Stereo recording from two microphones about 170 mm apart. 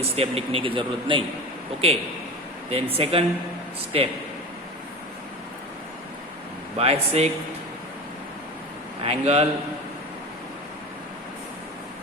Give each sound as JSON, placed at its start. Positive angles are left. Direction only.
{"t": 0.0, "sound": "a man's voice", "side_deg": -35}
{"t": 2.6, "sound": "a man's voice", "side_deg": -35}
{"t": 6.7, "sound": "a man's voice", "side_deg": -35}
{"t": 9.0, "sound": "a man's voice", "side_deg": -35}